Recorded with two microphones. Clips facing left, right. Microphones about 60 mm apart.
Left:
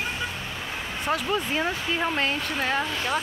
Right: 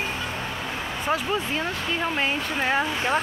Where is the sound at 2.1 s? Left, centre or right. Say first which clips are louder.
Right 1 dB; centre.